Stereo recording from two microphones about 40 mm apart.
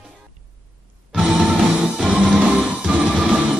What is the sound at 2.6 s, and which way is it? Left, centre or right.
Music, right.